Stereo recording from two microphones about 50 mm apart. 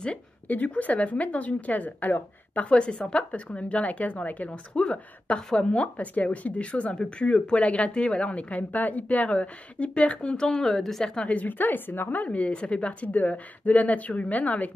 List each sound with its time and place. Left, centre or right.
0.5 s a woman's voice: left
10.3 s a woman's voice: centre
11.2 s a woman's voice: left
12.3 s a woman's voice: left